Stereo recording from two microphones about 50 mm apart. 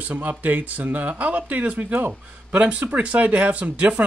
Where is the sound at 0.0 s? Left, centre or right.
Right.